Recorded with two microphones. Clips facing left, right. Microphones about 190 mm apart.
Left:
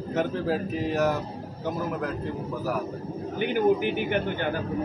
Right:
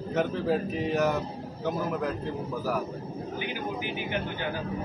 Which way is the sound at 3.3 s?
55° left (ahead or behind).